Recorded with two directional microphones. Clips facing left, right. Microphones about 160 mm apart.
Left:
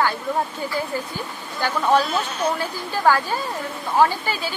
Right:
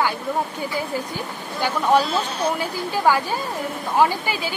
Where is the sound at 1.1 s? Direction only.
10° right (ahead or behind).